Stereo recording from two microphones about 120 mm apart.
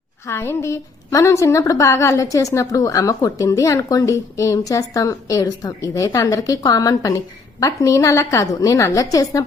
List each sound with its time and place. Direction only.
0.3 s a woman's voice: 20° left (ahead or behind)